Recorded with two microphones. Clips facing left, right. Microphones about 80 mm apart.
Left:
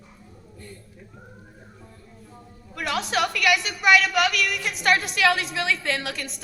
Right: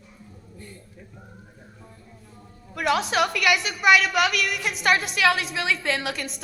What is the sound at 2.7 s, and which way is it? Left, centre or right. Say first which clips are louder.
A woman's voice: right 3 dB; centre.